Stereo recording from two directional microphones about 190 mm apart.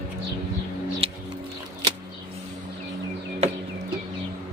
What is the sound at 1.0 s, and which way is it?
Music, 30° right (ahead or behind).